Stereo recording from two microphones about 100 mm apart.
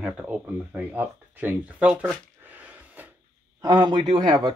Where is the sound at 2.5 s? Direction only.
15° right (ahead or behind).